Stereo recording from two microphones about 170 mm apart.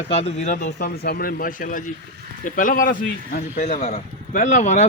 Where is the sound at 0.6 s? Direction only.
70° left (ahead or behind).